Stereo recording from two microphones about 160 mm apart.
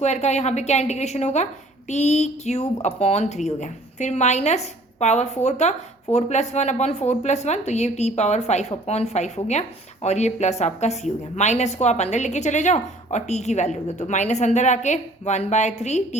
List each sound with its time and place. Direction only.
0.0 s a woman's voice: 45° left (ahead or behind)